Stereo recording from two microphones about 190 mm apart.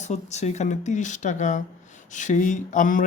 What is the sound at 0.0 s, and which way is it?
Speech, 35° left (ahead or behind).